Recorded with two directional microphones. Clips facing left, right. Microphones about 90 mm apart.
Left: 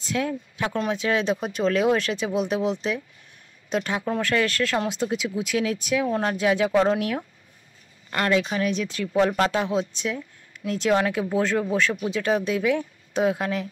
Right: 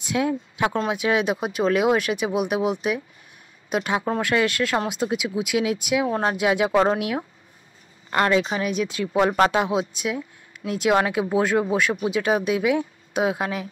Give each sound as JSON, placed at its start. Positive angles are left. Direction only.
{"t": 0.0, "sound": "speech", "side_deg": -15}
{"t": 8.1, "sound": "speech", "side_deg": -25}